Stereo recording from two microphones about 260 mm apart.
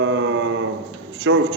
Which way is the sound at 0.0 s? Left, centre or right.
Right.